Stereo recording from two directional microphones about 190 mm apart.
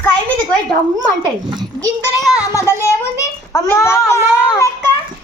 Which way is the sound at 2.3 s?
15° left (ahead or behind).